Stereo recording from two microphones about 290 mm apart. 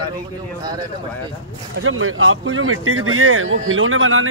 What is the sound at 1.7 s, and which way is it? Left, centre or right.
Speech, right.